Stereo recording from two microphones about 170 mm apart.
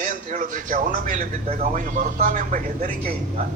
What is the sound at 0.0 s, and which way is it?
A man's voice, 50° right (ahead or behind).